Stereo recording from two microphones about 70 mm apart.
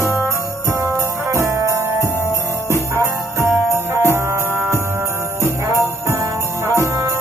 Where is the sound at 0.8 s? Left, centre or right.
Right.